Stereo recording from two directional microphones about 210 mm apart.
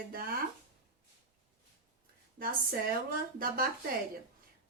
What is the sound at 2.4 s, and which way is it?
A woman's voice, 45° right (ahead or behind).